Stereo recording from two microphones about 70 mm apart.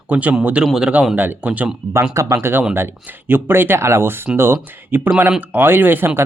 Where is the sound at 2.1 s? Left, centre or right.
Right.